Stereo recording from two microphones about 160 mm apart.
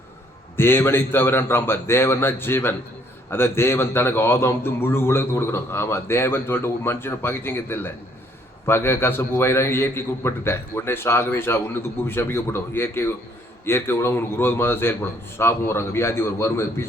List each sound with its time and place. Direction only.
0.5 s a man's voice: 15° left (ahead or behind)